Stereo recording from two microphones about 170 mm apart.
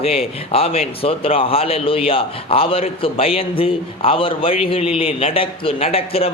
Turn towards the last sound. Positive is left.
turn(degrees=35)  # may be behind; listen again after turning